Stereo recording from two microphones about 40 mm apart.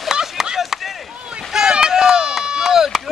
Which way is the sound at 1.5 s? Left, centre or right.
Centre.